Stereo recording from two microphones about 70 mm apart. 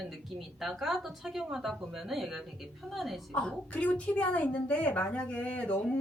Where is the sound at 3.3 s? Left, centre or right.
Centre.